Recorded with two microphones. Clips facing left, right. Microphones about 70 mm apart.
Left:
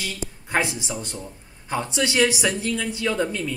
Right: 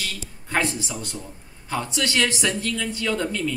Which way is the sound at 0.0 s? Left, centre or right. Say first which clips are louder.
Left 2 dB; centre.